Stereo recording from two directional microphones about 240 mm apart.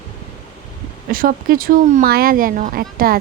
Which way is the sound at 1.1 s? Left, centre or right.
Right.